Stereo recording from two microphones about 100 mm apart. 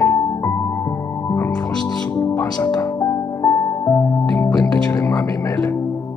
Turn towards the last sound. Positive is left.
turn(degrees=35)  # may be behind; listen again after turning